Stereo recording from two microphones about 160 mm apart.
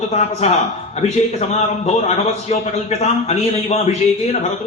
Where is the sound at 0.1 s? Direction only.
45° left (ahead or behind).